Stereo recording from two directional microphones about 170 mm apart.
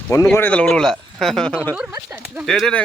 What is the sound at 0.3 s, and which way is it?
Speech, 10° left (ahead or behind).